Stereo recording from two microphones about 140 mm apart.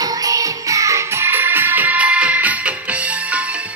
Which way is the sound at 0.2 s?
25° right (ahead or behind).